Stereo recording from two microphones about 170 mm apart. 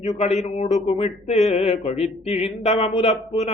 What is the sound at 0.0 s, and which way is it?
A man's voice, 40° left (ahead or behind).